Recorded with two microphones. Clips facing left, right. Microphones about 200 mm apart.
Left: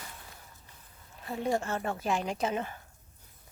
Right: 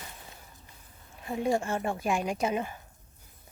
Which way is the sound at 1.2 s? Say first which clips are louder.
Right 2 dB; 15° right (ahead or behind).